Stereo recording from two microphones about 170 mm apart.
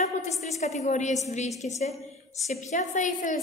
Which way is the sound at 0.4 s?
40° left (ahead or behind).